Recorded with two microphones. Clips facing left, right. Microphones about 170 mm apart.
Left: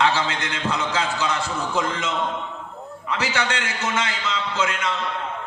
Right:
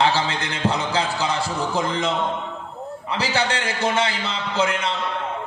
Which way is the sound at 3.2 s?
35° right (ahead or behind).